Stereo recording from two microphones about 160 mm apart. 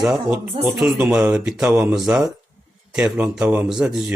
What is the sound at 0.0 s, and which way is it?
Speech, 5° right (ahead or behind).